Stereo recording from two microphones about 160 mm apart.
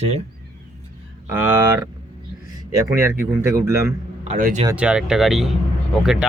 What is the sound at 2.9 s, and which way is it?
Speech, 15° right (ahead or behind).